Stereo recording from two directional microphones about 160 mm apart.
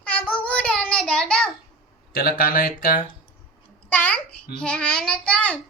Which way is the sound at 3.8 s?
10° left (ahead or behind).